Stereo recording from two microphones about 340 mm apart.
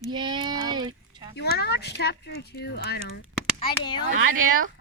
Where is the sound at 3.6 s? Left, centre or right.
Centre.